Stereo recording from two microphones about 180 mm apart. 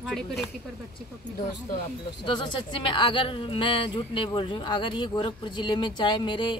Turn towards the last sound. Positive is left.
turn(degrees=25)  # may be behind; listen again after turning